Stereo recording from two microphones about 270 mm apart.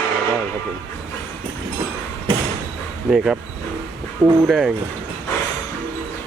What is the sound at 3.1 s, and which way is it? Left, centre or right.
Speech, centre.